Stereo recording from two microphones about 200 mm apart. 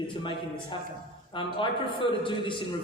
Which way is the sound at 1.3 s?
25° left (ahead or behind).